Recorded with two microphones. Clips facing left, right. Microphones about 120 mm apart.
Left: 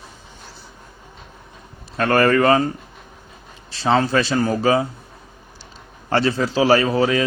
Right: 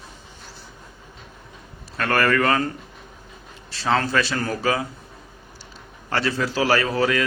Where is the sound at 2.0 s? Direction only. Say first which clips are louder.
Left 5 dB; 25° left (ahead or behind).